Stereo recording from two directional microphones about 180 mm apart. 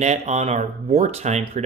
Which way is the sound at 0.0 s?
40° right (ahead or behind).